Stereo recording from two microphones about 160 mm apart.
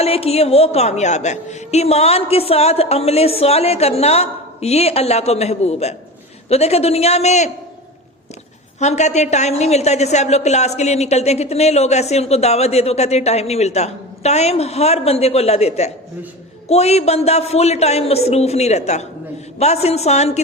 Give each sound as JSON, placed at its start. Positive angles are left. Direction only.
{"t": 0.0, "sound": "a woman's voice", "side_deg": 40}
{"t": 8.8, "sound": "a woman's voice", "side_deg": 45}